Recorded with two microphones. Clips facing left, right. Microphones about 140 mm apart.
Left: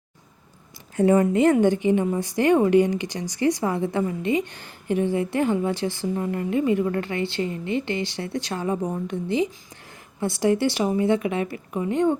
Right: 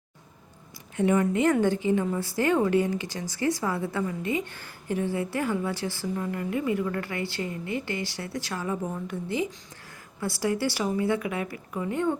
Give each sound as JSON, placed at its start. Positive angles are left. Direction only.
{"t": 0.9, "sound": "speech", "side_deg": 35}
{"t": 1.5, "sound": "a woman's voice", "side_deg": 15}